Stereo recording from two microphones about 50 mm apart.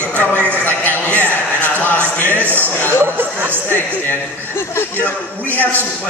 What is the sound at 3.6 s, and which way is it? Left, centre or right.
Speech, left.